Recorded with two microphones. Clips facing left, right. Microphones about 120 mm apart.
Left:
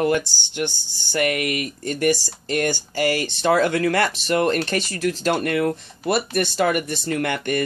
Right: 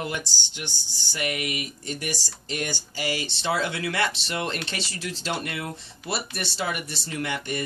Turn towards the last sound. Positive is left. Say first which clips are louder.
# left 7 dB
turn(degrees=60)  # may be behind; listen again after turning